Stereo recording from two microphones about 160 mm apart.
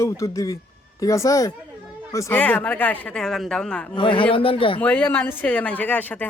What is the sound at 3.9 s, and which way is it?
Speech, 30° left (ahead or behind).